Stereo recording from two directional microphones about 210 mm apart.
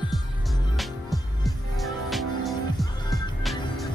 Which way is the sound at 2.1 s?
Centre (ahead or behind).